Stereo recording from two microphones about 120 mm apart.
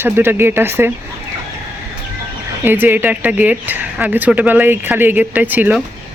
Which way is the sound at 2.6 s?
15° right (ahead or behind).